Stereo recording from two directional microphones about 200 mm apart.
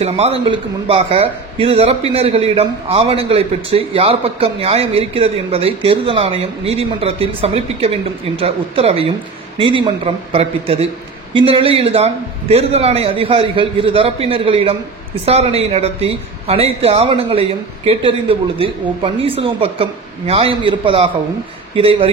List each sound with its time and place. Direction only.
0.0 s a man's voice: 30° right (ahead or behind)